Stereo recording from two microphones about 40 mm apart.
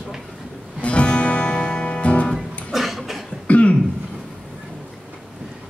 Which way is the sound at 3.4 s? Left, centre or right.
Left.